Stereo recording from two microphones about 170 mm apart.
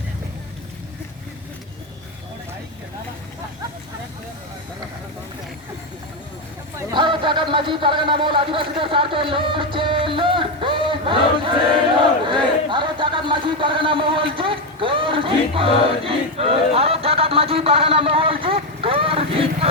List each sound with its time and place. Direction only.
6.9 s a man's voice: 30° right (ahead or behind)
12.3 s a sound: 30° right (ahead or behind)
18.4 s vehicle: 35° right (ahead or behind)